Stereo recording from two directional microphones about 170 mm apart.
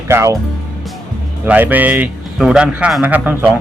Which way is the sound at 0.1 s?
15° right (ahead or behind).